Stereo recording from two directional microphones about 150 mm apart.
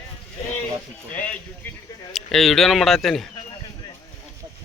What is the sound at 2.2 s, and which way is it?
A man's voice, centre (ahead or behind).